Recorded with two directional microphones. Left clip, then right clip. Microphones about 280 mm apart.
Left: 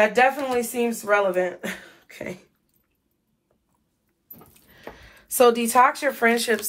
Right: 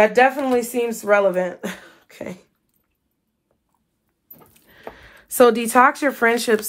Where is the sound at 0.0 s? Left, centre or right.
Centre.